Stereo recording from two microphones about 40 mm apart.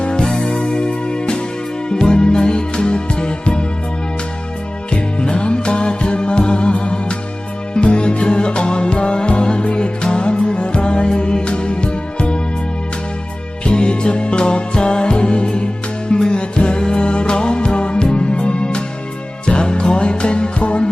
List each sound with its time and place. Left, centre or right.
0.0 s music: left
4.9 s music: left
13.7 s music: left